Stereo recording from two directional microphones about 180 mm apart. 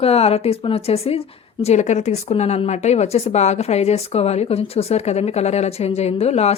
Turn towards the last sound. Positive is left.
turn(degrees=35)  # may be behind; listen again after turning